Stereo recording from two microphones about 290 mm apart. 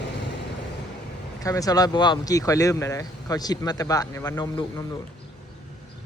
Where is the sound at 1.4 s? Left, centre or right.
Centre.